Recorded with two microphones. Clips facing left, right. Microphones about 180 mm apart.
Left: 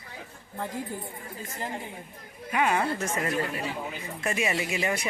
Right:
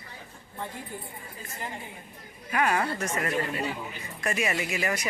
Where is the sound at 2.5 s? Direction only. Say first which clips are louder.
Left 1 dB; 20° left (ahead or behind).